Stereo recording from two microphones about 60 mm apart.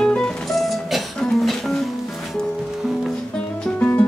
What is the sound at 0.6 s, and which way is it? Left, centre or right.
Music, centre.